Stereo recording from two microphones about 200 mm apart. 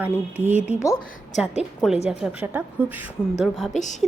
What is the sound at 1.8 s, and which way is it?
A woman's voice, centre (ahead or behind).